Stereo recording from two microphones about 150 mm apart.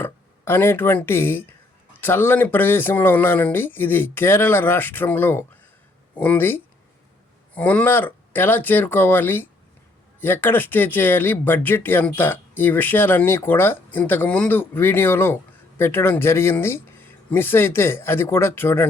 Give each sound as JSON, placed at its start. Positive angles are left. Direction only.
{"t": 0.0, "sound": "speech", "side_deg": 15}